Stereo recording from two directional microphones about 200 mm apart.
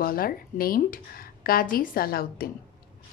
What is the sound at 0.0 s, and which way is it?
A woman's voice, 45° left (ahead or behind).